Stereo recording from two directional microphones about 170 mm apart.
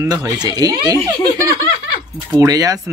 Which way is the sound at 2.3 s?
20° right (ahead or behind).